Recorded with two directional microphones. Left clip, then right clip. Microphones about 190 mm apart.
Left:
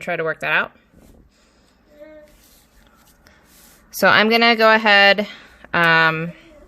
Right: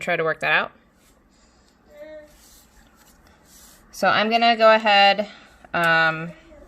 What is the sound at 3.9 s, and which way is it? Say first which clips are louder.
Speech: left 5 dB; 40° left (ahead or behind).